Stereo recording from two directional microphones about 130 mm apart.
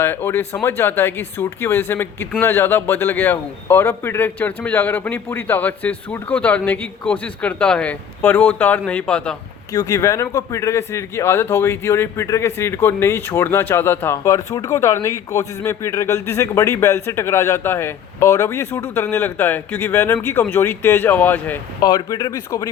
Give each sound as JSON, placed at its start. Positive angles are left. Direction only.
{"t": 0.0, "sound": "a man's voice", "side_deg": 20}
{"t": 9.7, "sound": "a man's voice", "side_deg": 25}
{"t": 21.8, "sound": "speech", "side_deg": 30}